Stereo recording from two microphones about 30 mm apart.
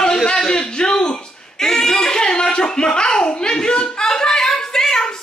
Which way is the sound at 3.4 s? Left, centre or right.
Left.